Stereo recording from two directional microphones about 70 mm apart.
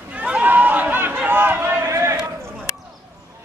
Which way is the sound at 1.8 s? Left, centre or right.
Right.